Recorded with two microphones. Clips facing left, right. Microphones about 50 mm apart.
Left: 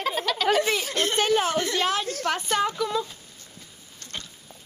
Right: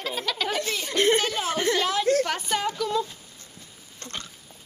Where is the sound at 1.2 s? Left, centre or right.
Left.